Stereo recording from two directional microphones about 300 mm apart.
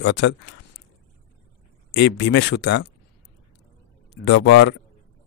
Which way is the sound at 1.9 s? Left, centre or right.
Left.